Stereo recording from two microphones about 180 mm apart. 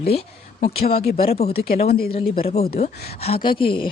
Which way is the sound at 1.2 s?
35° left (ahead or behind).